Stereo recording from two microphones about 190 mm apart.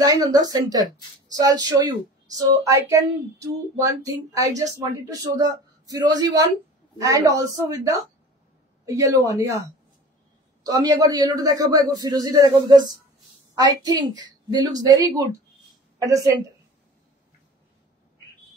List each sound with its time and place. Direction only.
0.0 s speech: 20° right (ahead or behind)
10.6 s a woman's voice: 20° right (ahead or behind)